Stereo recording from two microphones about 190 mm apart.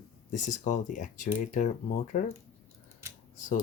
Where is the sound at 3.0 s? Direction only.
15° right (ahead or behind).